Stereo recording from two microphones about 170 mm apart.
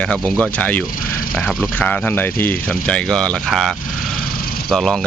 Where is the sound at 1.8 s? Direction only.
10° left (ahead or behind).